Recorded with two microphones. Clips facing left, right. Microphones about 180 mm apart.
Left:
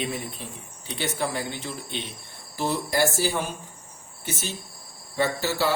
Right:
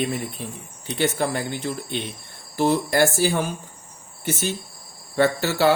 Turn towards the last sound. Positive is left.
turn(degrees=-60)  # may be behind; listen again after turning